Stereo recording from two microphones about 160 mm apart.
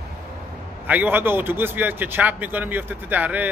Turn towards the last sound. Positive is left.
turn(degrees=-10)  # may be behind; listen again after turning